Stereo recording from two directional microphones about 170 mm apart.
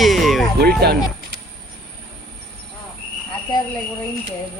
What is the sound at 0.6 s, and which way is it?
Speech, 70° right (ahead or behind).